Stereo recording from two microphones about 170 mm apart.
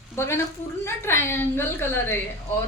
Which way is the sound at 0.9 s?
15° left (ahead or behind).